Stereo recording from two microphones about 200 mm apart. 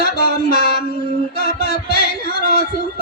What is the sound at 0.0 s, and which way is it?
Music, 50° left (ahead or behind).